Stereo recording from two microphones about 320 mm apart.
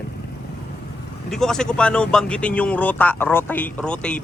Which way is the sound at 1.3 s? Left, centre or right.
Centre.